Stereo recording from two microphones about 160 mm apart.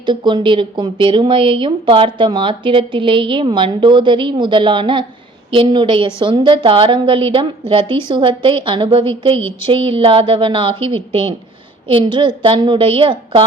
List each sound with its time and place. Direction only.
0.0 s speech: 30° right (ahead or behind)
9.4 s speech: 15° left (ahead or behind)
9.6 s speech: 35° right (ahead or behind)